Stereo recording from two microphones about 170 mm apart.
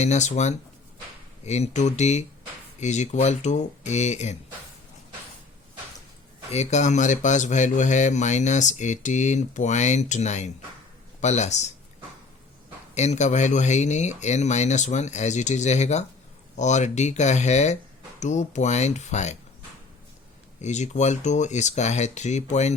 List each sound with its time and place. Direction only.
0.0 s speech: 45° left (ahead or behind)
6.5 s speech: 40° left (ahead or behind)
12.9 s speech: 40° left (ahead or behind)
20.6 s speech: 45° left (ahead or behind)